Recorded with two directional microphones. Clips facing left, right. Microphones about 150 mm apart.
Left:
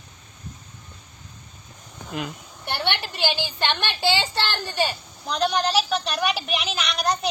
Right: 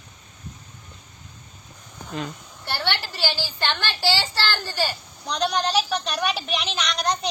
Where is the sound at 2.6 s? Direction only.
20° left (ahead or behind).